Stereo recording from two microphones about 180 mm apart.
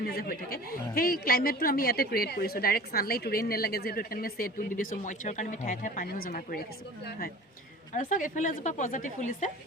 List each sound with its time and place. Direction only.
0.0 s a woman's voice: 55° left (ahead or behind)
7.9 s a woman's voice: 45° left (ahead or behind)